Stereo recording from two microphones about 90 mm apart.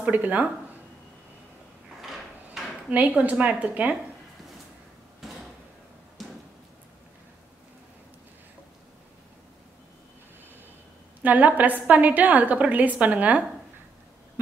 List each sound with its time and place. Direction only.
0.0 s a woman's voice: 20° right (ahead or behind)
2.0 s drawer open or close: centre (ahead or behind)
2.9 s a woman's voice: 15° right (ahead or behind)
6.2 s a sound: centre (ahead or behind)
11.2 s a woman's voice: 20° right (ahead or behind)